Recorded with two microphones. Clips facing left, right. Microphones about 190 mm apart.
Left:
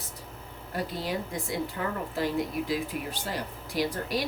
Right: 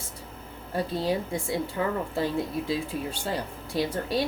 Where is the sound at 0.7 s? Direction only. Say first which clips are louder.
Right 5 dB; 30° right (ahead or behind).